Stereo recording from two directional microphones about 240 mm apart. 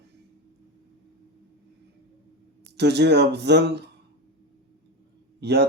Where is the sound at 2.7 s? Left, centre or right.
Right.